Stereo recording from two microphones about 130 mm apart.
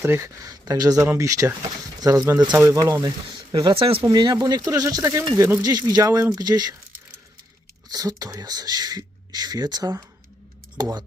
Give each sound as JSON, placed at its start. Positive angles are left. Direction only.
{"t": 0.0, "sound": "speech", "side_deg": -20}
{"t": 4.0, "sound": "speech", "side_deg": -35}
{"t": 7.9, "sound": "speech", "side_deg": -30}